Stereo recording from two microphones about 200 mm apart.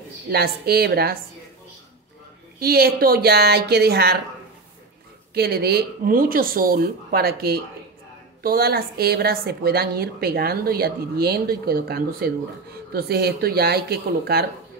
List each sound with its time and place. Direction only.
0.3 s a woman's voice: 50° right (ahead or behind)
2.6 s a woman's voice: 50° right (ahead or behind)
5.3 s a woman's voice: 50° right (ahead or behind)